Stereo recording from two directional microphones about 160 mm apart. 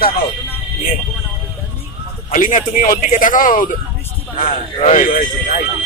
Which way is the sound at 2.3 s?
55° left (ahead or behind).